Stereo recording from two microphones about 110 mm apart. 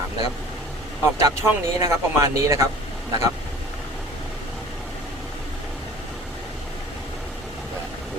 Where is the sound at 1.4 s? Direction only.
25° right (ahead or behind).